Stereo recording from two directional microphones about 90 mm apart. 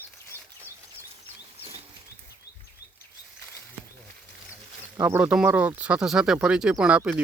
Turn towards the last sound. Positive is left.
turn(degrees=-10)  # may be behind; listen again after turning